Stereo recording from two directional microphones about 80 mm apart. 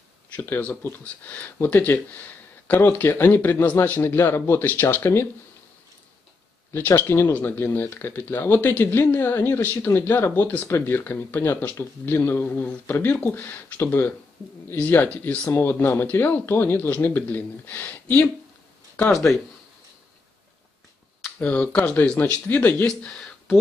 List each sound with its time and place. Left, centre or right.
1.0 s speech: centre
6.7 s speech: left
19.0 s speech: centre
21.4 s speech: centre